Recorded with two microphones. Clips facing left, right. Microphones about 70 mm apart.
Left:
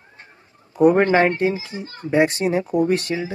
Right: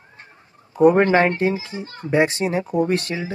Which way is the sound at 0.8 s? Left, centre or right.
Right.